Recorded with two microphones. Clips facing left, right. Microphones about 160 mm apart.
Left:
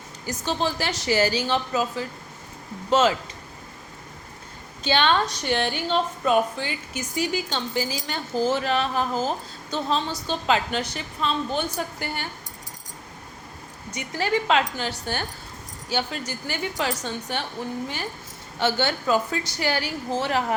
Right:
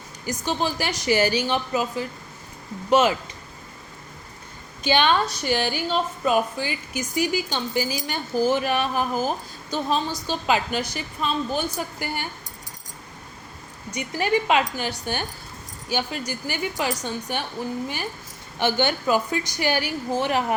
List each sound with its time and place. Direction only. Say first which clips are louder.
0.4 s a woman's voice: even; 15° right (ahead or behind)
4.8 s a woman's voice: right 1 dB; 15° right (ahead or behind)
13.9 s a woman's voice: right 2 dB; 15° right (ahead or behind)
18.6 s a woman's voice: right 1 dB; 15° right (ahead or behind)